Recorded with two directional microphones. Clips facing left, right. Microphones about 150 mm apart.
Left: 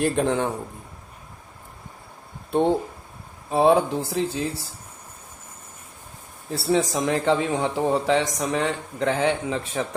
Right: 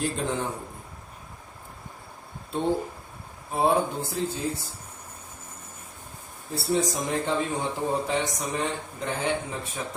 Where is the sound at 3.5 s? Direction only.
90° left.